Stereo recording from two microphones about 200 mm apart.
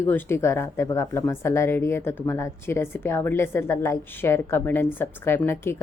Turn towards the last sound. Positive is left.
turn(degrees=10)  # may be behind; listen again after turning